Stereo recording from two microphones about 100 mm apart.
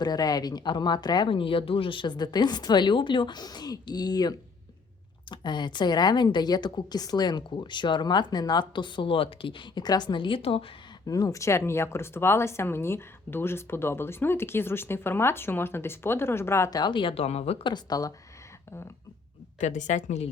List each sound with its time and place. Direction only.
0.0 s speech: 40° left (ahead or behind); by 10.7 s 70° left (ahead or behind)
11.0 s speech: 35° left (ahead or behind)
16.6 s speech: 40° left (ahead or behind)
16.9 s speech: 60° left (ahead or behind); by 17.6 s 90° left
17.6 s speech: 45° left (ahead or behind)